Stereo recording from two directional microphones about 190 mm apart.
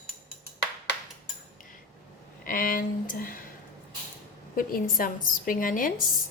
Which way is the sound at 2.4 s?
50° left (ahead or behind).